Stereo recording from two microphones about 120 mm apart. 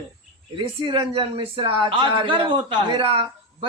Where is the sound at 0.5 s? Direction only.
45° right (ahead or behind).